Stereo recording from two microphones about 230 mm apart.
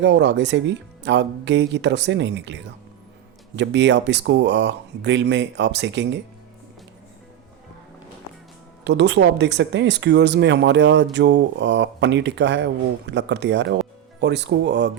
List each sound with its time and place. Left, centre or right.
0.0 s speech: right
8.8 s speech: right